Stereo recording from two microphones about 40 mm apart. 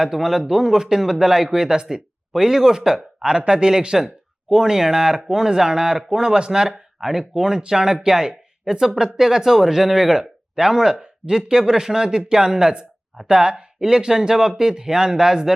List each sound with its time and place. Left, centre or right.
0.0 s speech: centre